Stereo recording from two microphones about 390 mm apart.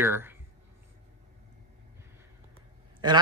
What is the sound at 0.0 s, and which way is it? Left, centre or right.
Speech, centre.